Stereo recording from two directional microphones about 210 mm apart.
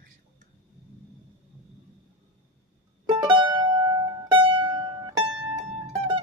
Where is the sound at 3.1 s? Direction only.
20° right (ahead or behind).